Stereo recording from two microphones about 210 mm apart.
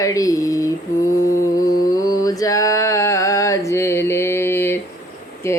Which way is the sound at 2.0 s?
15° left (ahead or behind).